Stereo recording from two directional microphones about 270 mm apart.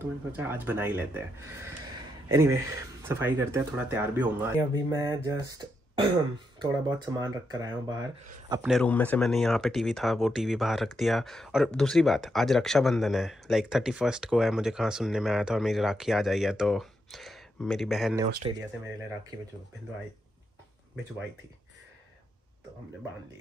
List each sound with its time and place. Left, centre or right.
0.0 s speech: centre
8.6 s speech: centre
18.4 s speech: centre